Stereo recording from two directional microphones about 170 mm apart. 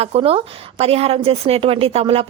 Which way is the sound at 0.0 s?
35° right (ahead or behind).